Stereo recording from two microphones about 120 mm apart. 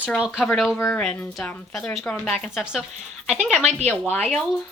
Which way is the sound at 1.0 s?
5° left (ahead or behind).